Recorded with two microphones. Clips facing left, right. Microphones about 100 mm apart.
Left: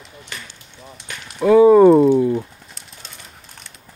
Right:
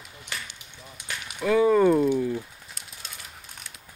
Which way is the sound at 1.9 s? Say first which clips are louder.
Left 9 dB; 65° left (ahead or behind).